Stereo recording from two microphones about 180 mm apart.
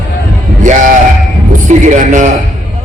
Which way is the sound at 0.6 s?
45° right (ahead or behind).